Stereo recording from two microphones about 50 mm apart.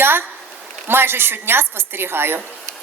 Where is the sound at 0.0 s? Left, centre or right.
Right.